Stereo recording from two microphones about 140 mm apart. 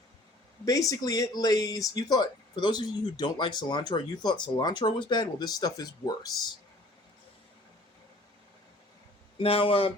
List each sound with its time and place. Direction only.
0.6 s speech: 25° left (ahead or behind)
9.4 s speech: 40° left (ahead or behind)